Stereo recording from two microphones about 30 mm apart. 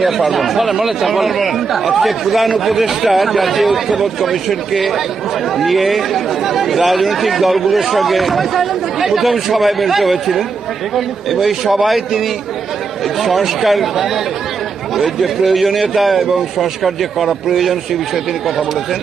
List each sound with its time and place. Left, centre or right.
0.0 s speech: centre
0.3 s speech: centre
13.2 s speech: centre